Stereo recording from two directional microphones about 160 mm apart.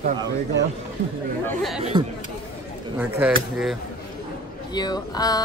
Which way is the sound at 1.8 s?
40° right (ahead or behind).